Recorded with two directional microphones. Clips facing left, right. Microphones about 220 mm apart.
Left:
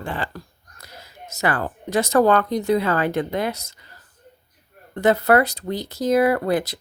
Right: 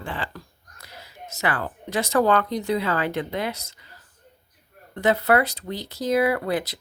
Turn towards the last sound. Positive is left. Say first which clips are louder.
# left 4 dB
turn(degrees=45)  # may be behind; listen again after turning